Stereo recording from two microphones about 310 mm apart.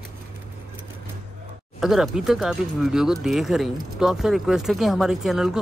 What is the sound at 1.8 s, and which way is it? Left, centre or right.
Speech, centre.